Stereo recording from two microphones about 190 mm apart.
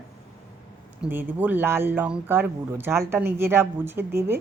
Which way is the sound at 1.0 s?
10° right (ahead or behind).